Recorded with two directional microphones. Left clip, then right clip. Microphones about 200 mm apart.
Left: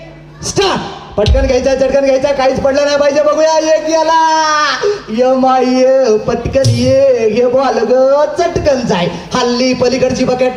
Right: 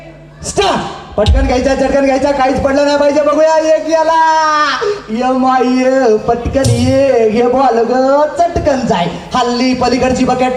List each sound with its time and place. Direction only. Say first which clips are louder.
1.2 s speech: left 1 dB; 50° left (ahead or behind)